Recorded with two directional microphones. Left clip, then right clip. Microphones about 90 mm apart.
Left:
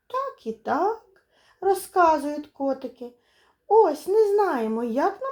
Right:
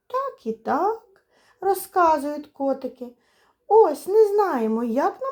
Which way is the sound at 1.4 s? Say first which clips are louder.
Even; 35° right (ahead or behind).